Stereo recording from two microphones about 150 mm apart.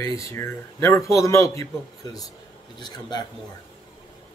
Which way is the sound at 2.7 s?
30° left (ahead or behind).